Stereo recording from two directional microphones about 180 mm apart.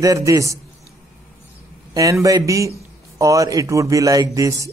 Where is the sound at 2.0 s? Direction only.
20° right (ahead or behind).